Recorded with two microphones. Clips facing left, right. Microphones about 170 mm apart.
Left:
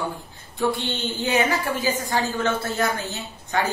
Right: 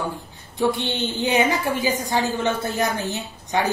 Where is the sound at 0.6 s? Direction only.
20° right (ahead or behind).